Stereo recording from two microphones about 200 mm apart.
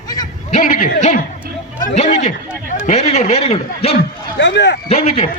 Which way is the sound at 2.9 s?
35° left (ahead or behind).